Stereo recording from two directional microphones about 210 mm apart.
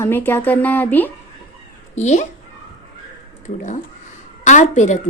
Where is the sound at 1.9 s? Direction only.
35° left (ahead or behind).